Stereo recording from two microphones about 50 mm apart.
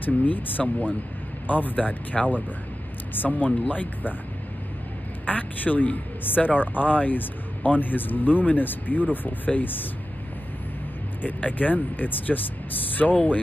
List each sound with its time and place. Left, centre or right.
0.0 s speech: left
5.2 s speech: left
11.2 s speech: left